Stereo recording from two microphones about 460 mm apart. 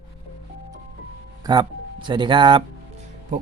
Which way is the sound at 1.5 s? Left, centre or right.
Centre.